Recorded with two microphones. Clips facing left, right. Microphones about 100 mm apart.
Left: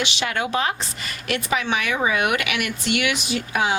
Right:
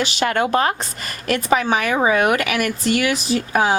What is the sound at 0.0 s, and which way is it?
Speech, 45° right (ahead or behind).